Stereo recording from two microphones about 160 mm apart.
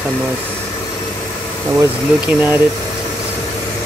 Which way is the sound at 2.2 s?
10° right (ahead or behind).